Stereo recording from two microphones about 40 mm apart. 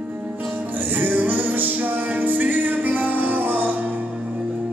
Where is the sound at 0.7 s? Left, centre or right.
Right.